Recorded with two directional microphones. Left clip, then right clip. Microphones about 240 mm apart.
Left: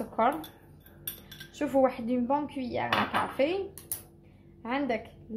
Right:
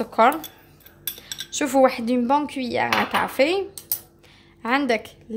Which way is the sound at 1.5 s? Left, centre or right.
Right.